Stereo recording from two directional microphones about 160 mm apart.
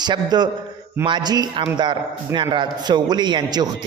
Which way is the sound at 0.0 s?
25° right (ahead or behind).